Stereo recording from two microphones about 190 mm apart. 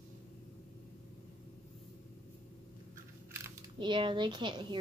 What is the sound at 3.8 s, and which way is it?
Speech, 25° right (ahead or behind).